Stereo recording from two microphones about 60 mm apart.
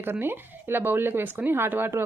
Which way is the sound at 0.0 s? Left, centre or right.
Right.